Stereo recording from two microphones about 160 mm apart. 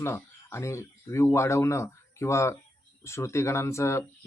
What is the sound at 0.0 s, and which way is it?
Speech, 15° left (ahead or behind).